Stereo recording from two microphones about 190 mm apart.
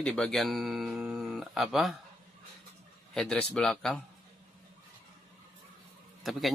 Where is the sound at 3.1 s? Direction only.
5° left (ahead or behind).